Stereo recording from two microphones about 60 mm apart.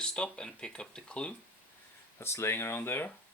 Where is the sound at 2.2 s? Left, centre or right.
Left.